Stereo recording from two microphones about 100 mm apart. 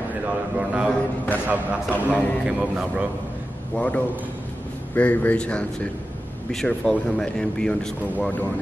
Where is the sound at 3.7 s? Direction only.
15° left (ahead or behind).